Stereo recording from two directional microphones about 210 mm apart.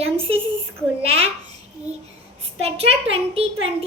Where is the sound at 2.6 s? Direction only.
30° right (ahead or behind).